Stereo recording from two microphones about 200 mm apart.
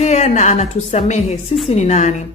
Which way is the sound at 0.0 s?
35° left (ahead or behind).